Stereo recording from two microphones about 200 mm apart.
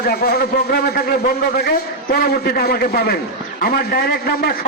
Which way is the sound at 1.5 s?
50° left (ahead or behind).